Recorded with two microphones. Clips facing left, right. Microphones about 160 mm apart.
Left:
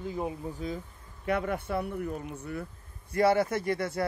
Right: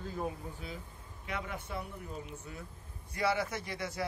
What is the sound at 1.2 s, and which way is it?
A man's voice, 55° left (ahead or behind).